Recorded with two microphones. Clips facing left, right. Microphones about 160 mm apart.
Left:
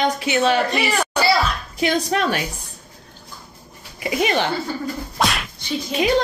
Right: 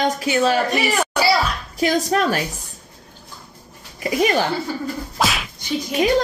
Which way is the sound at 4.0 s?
40° right (ahead or behind).